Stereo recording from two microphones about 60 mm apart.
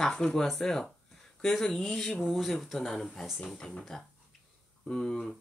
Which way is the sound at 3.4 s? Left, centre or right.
Centre.